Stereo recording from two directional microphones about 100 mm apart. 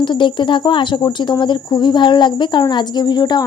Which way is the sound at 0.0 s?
50° left (ahead or behind).